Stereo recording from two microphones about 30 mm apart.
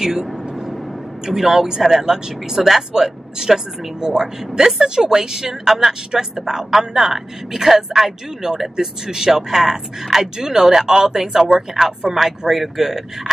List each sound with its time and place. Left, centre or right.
0.0 s vehicle: centre
1.2 s speech: centre